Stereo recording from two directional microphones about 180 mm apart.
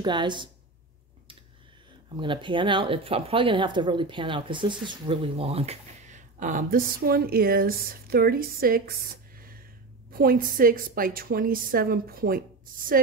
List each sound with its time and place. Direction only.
0.0 s speech: 25° right (ahead or behind)
2.1 s speech: 25° right (ahead or behind); by 8.9 s 55° right (ahead or behind)
10.1 s a woman's voice: 55° right (ahead or behind)